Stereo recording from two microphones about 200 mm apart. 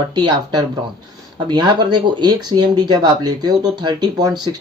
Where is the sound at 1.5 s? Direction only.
20° right (ahead or behind).